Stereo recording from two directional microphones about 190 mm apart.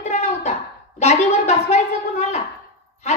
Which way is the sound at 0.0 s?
35° left (ahead or behind).